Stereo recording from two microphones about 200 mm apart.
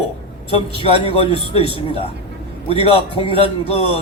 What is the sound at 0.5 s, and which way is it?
A man's voice, 30° left (ahead or behind).